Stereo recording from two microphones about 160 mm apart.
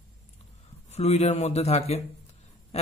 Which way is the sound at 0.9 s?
45° left (ahead or behind).